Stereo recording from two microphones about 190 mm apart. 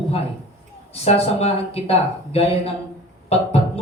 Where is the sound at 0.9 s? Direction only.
30° left (ahead or behind).